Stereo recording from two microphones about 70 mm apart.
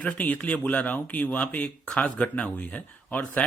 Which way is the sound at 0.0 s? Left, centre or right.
Centre.